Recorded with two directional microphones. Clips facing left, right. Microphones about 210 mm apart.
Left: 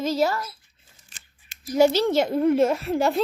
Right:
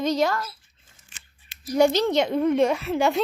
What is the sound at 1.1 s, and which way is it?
Scissors, 40° left (ahead or behind).